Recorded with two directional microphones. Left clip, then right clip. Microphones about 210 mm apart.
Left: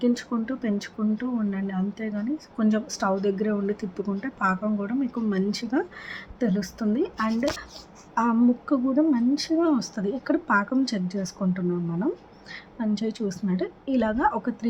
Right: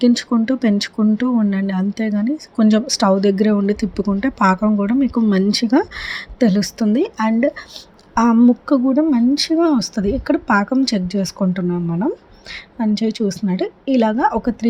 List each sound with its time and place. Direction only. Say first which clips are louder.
0.0 s speech: right 9 dB; 35° right (ahead or behind)